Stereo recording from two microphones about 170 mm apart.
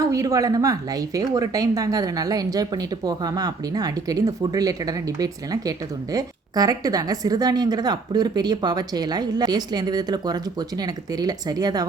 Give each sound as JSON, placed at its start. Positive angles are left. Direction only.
{"t": 0.0, "sound": "a woman's voice", "side_deg": -20}